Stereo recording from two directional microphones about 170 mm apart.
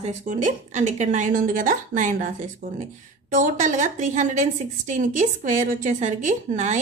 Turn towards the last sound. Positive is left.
turn(degrees=-45)  # may be behind; listen again after turning